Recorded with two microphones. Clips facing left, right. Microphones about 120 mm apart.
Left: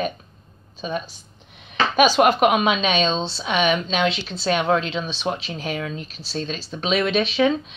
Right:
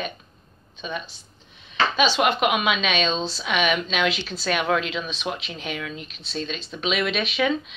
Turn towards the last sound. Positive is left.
turn(degrees=30)  # may be behind; listen again after turning